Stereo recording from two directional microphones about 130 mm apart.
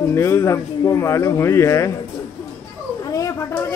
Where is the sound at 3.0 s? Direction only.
25° left (ahead or behind).